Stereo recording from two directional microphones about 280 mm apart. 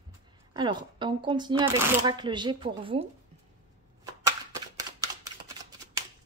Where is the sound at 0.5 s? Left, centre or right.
Centre.